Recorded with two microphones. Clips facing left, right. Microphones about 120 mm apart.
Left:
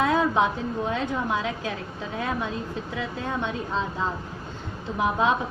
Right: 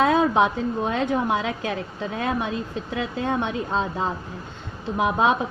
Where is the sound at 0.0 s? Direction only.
70° right (ahead or behind).